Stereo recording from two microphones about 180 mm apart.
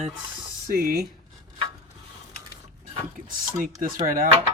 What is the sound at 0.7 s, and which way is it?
Speech, 55° right (ahead or behind).